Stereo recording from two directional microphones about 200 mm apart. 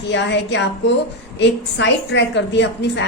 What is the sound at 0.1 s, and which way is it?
A woman's voice, 60° left (ahead or behind).